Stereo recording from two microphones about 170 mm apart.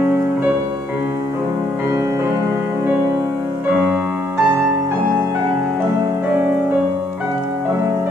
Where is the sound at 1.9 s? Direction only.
15° right (ahead or behind).